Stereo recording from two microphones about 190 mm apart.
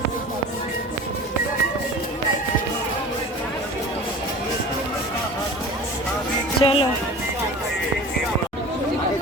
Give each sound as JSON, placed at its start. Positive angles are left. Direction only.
{"t": 6.6, "sound": "speech", "side_deg": 25}